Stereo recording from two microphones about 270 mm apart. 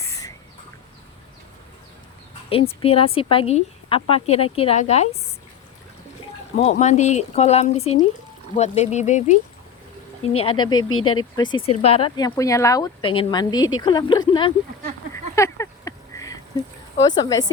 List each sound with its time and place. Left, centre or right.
0.0 s bird: centre
2.5 s speech: left
6.6 s speech: left
10.8 s speech: left
11.3 s speech: centre
15.4 s a sound: centre
17.0 s speech: centre